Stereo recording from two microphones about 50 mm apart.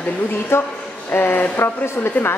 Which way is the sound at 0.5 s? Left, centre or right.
Left.